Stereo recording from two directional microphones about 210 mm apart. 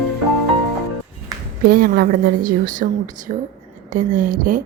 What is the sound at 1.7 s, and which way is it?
A woman's voice, 45° right (ahead or behind).